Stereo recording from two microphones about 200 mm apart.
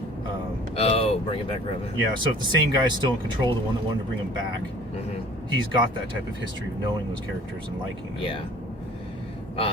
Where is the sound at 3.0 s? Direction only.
20° right (ahead or behind).